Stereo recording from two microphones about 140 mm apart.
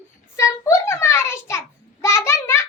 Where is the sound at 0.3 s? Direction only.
20° left (ahead or behind).